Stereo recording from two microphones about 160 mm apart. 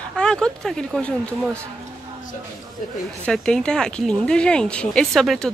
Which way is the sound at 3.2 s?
5° left (ahead or behind).